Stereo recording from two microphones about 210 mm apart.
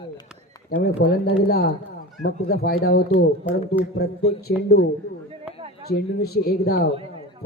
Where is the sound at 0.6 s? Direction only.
45° left (ahead or behind).